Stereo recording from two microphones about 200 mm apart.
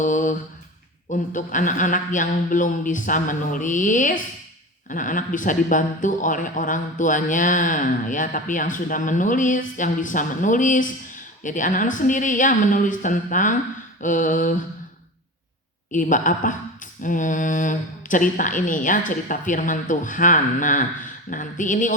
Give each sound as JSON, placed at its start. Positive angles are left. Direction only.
{"t": 0.0, "sound": "a sound", "side_deg": 40}
{"t": 1.1, "sound": "speech", "side_deg": 40}
{"t": 15.9, "sound": "speech", "side_deg": 40}